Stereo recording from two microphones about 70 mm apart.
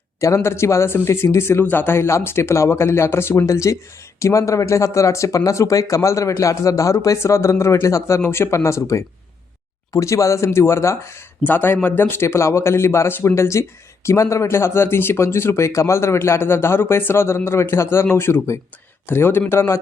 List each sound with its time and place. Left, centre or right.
0.2 s speech: left
3.4 s speech: left
11.4 s speech: left